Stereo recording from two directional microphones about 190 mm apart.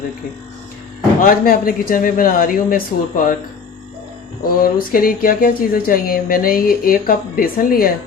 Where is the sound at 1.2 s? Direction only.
50° left (ahead or behind).